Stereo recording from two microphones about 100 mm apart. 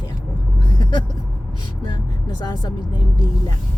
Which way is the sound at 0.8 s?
45° left (ahead or behind).